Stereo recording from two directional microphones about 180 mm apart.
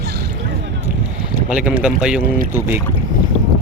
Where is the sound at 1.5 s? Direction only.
5° right (ahead or behind).